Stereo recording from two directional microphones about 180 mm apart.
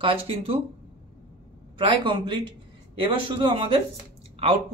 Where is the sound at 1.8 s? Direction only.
30° right (ahead or behind).